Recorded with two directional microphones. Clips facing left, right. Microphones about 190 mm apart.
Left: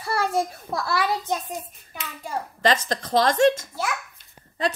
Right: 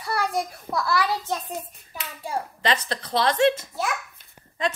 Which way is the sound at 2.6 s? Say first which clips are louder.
Left 5 dB; 45° left (ahead or behind).